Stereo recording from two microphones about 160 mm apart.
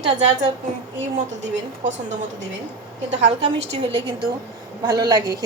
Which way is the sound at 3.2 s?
40° right (ahead or behind).